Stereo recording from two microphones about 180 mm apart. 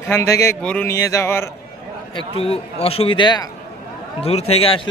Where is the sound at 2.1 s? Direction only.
30° left (ahead or behind).